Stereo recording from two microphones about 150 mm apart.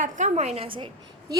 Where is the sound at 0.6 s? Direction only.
35° right (ahead or behind).